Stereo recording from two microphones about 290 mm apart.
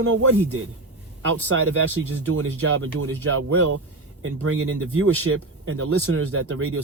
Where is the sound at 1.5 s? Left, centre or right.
Right.